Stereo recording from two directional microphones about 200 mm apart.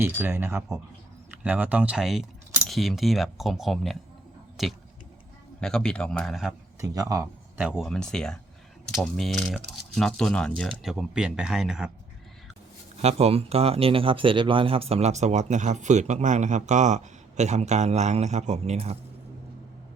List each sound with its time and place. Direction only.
0.0 s speech: 10° right (ahead or behind)
6.8 s speech: 15° right (ahead or behind); by 11.9 s centre (ahead or behind)
13.0 s speech: 30° right (ahead or behind)